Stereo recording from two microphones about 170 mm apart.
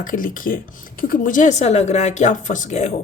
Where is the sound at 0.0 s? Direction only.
55° left (ahead or behind).